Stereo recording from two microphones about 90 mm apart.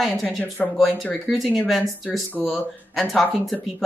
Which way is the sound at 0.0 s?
Centre (ahead or behind).